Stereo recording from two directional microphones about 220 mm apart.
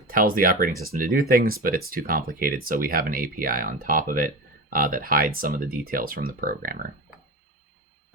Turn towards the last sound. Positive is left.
turn(degrees=-40)  # may be behind; listen again after turning